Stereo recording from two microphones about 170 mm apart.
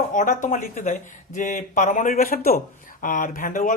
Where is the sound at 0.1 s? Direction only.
50° left (ahead or behind).